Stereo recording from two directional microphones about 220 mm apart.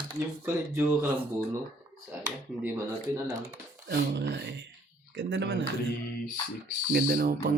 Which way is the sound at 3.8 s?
50° right (ahead or behind).